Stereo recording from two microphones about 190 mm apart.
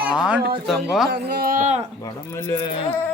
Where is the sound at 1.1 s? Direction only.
55° right (ahead or behind); by 1.9 s 40° right (ahead or behind).